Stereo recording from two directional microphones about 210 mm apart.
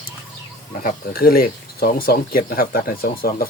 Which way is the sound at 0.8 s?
45° left (ahead or behind).